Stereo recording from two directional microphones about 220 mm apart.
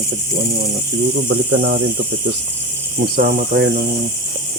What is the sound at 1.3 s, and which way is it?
Speech, 55° right (ahead or behind).